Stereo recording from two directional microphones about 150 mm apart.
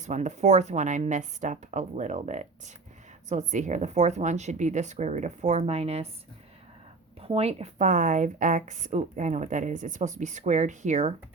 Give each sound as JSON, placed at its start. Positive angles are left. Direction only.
{"t": 0.0, "sound": "speech", "side_deg": -55}
{"t": 7.2, "sound": "speech", "side_deg": -40}